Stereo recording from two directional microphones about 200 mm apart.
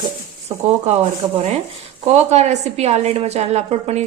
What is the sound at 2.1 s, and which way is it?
Speech, 35° right (ahead or behind).